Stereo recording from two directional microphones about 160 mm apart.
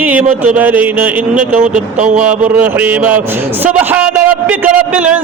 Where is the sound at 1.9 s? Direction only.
50° right (ahead or behind).